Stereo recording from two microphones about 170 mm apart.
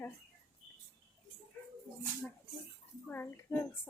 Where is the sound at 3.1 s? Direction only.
15° left (ahead or behind).